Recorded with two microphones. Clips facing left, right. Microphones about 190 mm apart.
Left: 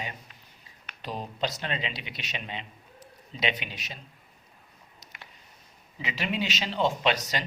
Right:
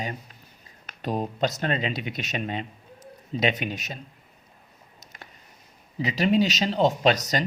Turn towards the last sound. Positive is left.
turn(degrees=-40)  # may be behind; listen again after turning